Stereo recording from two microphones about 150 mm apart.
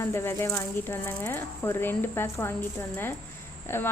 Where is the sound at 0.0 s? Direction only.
20° left (ahead or behind).